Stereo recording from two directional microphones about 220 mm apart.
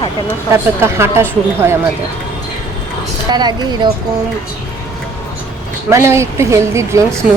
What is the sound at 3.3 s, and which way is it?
Speech, 20° right (ahead or behind).